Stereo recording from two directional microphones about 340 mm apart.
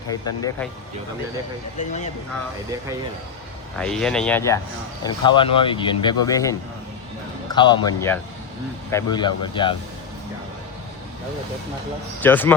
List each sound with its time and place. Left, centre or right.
0.1 s speech: centre
1.8 s speech: left
3.8 s speech: centre
7.5 s speech: centre
12.2 s speech: centre